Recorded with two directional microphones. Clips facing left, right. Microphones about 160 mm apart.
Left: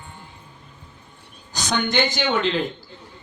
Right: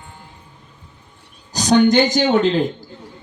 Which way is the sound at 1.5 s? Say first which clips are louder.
Right 10 dB; 40° right (ahead or behind).